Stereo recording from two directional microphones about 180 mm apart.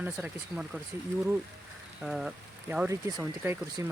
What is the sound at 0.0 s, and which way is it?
Speech, 5° right (ahead or behind).